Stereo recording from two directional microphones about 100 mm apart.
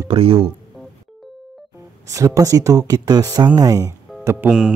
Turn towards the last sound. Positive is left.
turn(degrees=-10)  # may be behind; listen again after turning